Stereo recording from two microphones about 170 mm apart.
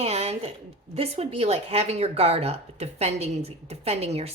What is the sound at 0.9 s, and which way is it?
A woman's voice, 35° right (ahead or behind).